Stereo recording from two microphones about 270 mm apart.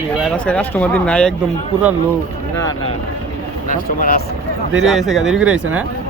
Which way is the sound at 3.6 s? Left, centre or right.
Left.